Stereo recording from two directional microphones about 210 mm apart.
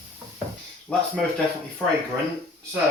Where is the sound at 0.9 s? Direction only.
5° left (ahead or behind).